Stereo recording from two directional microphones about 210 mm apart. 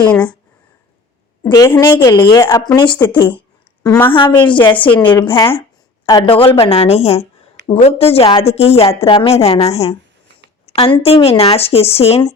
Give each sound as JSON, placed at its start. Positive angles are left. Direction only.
{"t": 1.5, "sound": "a woman's voice", "side_deg": 15}